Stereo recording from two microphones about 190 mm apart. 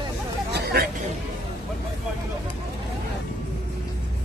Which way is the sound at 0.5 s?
55° right (ahead or behind).